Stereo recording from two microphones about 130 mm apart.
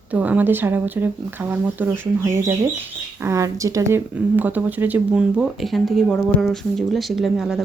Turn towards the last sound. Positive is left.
turn(degrees=0)  # may be behind; listen again after turning